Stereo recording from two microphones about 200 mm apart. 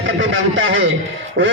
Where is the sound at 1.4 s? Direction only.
60° right (ahead or behind).